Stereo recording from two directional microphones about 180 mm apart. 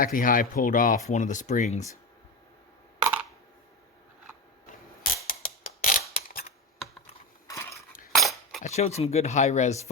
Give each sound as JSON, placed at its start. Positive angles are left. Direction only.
{"t": 0.0, "sound": "speech", "side_deg": 50}
{"t": 3.0, "sound": "camera", "side_deg": -10}
{"t": 5.3, "sound": "a sound", "side_deg": 50}
{"t": 7.4, "sound": "cutlery", "side_deg": 15}
{"t": 8.1, "sound": "cutlery", "side_deg": 0}
{"t": 8.6, "sound": "speech", "side_deg": 35}